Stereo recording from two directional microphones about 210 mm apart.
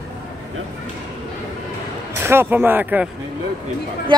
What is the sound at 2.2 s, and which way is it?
Speech, 10° right (ahead or behind).